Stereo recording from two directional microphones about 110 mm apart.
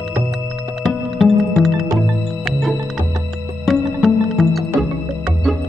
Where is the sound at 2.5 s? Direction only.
Centre (ahead or behind).